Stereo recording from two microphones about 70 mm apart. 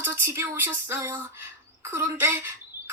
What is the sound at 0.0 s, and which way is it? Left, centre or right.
A woman's voice, right.